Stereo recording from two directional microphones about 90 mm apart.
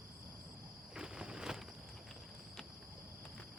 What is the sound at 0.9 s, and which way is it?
Walk, 10° right (ahead or behind).